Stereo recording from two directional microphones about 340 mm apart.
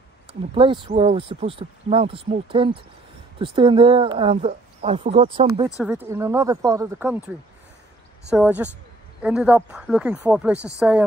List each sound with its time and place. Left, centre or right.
0.3 s speech: centre
5.8 s speech: centre
8.3 s speech: centre